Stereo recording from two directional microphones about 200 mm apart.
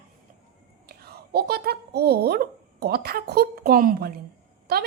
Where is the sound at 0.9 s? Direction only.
50° right (ahead or behind).